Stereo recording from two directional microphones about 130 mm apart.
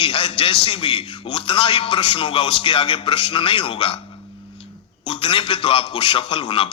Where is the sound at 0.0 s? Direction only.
45° left (ahead or behind).